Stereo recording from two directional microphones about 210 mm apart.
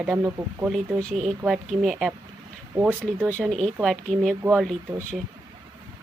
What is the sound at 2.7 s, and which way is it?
Speech, 15° right (ahead or behind).